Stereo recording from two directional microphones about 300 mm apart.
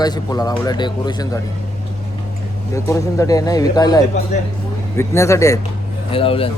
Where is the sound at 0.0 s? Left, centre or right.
Centre.